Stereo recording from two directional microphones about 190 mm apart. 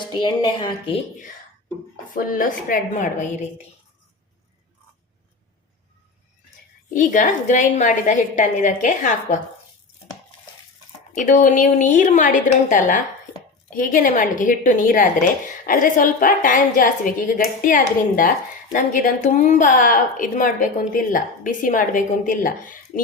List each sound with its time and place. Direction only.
0.1 s a woman's voice: 25° left (ahead or behind)
2.1 s a woman's voice: 45° left (ahead or behind)
6.9 s a woman's voice: 45° left (ahead or behind)
11.1 s a woman's voice: 45° left (ahead or behind)